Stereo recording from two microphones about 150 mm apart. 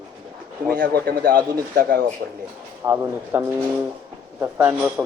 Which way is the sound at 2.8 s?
15° right (ahead or behind).